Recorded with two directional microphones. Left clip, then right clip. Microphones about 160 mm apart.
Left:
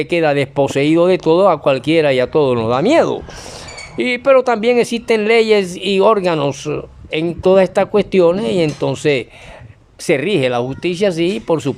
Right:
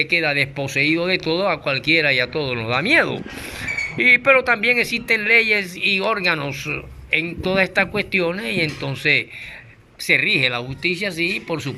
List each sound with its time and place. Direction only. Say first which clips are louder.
0.0 s speech: left 4 dB; 45° left (ahead or behind)